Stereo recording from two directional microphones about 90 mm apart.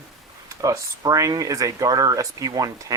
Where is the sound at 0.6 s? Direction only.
40° right (ahead or behind).